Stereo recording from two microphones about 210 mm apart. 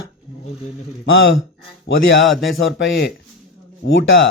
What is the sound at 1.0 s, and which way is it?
Speech, 65° left (ahead or behind).